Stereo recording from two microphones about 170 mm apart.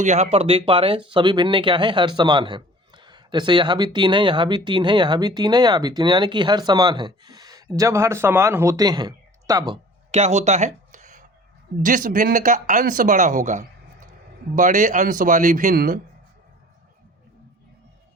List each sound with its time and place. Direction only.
0.0 s speech: 40° right (ahead or behind); by 9.7 s 25° right (ahead or behind)
10.1 s a sound: 40° right (ahead or behind)
11.8 s speech: 50° right (ahead or behind)